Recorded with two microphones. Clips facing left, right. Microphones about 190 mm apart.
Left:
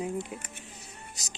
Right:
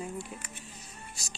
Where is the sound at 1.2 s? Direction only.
20° left (ahead or behind).